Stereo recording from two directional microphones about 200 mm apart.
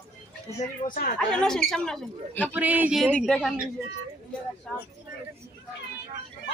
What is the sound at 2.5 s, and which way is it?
Speech, 10° right (ahead or behind).